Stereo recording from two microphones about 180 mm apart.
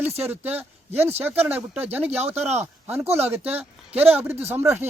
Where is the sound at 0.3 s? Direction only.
10° right (ahead or behind).